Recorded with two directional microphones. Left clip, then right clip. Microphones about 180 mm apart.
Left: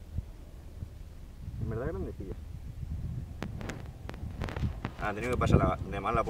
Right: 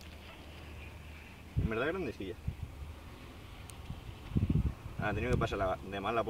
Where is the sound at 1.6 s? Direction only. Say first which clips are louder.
Right 3 dB; 30° right (ahead or behind).